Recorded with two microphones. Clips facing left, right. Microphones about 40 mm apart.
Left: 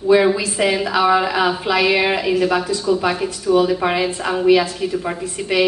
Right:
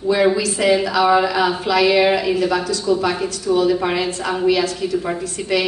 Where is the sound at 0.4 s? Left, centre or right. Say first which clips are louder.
Right 2 dB; centre.